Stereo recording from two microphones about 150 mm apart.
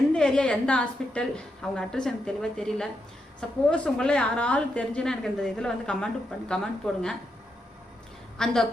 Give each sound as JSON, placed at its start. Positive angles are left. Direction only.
{"t": 0.1, "sound": "a woman's voice", "side_deg": 5}
{"t": 8.4, "sound": "a woman's voice", "side_deg": 5}